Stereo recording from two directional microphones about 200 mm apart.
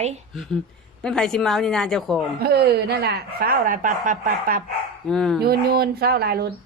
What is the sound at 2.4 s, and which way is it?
Speech, 50° right (ahead or behind).